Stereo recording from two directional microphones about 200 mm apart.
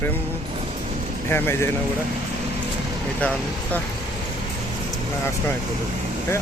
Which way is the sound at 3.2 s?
5° left (ahead or behind).